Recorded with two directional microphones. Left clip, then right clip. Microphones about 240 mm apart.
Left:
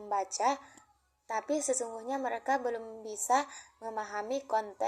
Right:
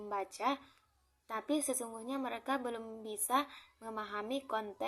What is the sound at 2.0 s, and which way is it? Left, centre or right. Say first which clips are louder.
A woman's voice: left 6 dB; centre.